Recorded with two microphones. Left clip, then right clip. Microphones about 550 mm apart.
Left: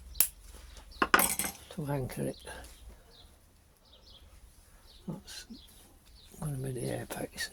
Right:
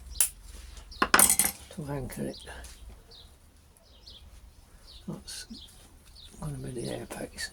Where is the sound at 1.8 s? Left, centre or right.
Left.